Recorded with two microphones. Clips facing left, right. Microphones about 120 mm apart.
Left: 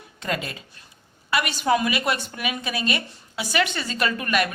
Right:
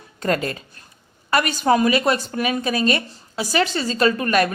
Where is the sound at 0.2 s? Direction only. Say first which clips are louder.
Right 7 dB; 45° right (ahead or behind).